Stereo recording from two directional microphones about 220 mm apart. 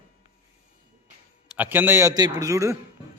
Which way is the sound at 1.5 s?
10° right (ahead or behind).